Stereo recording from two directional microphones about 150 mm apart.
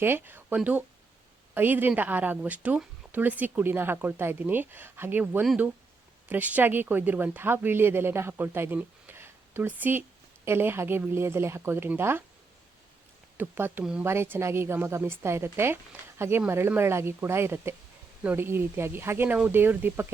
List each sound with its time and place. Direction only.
0.0 s speech: 15° right (ahead or behind)
13.3 s speech: 15° right (ahead or behind)